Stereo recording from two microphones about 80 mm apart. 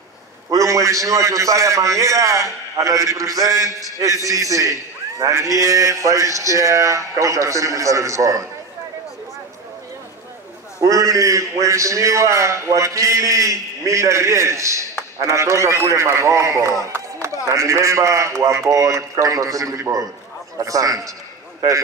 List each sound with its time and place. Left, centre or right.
0.5 s a man's voice: right
10.8 s a man's voice: right